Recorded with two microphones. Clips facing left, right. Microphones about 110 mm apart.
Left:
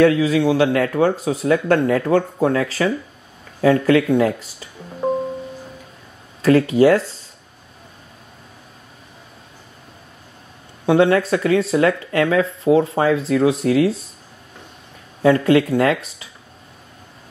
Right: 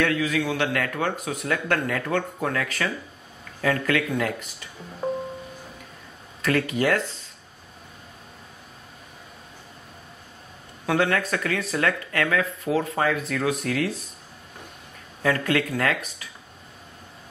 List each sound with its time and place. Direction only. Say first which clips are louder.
0.0 s speech: left 9 dB; 30° left (ahead or behind)
6.4 s speech: left 10 dB; 30° left (ahead or behind)
10.9 s speech: left 8 dB; 25° left (ahead or behind)
15.2 s speech: left 9 dB; 25° left (ahead or behind)